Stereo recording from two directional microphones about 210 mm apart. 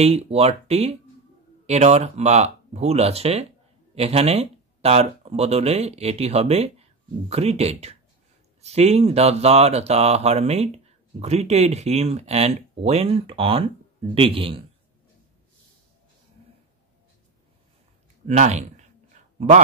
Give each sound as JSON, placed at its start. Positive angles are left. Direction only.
{"t": 0.0, "sound": "speech", "side_deg": -30}
{"t": 18.2, "sound": "speech", "side_deg": -35}
{"t": 19.2, "sound": "a sound", "side_deg": -35}